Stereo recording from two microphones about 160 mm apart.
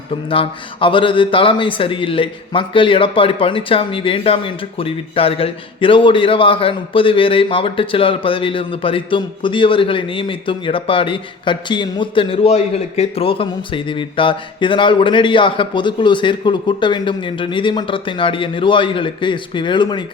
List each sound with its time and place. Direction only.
0.3 s a man's voice: 35° left (ahead or behind)